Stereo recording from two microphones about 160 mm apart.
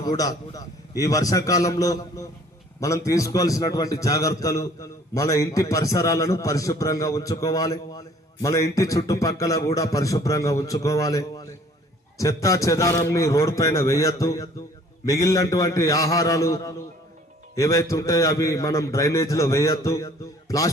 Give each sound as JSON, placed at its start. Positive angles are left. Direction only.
{"t": 0.0, "sound": "a man's voice", "side_deg": 25}